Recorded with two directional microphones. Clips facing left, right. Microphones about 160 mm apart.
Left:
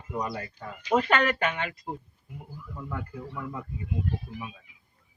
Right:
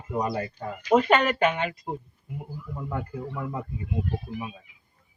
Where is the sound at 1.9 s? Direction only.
25° right (ahead or behind).